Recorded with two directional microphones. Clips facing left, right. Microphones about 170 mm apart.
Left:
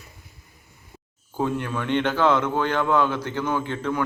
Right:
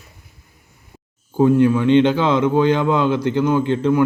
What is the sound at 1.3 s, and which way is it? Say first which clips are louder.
Speech: right 12 dB; 15° right (ahead or behind).